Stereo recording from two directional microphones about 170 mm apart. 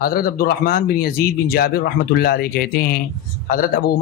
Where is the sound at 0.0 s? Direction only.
60° left (ahead or behind).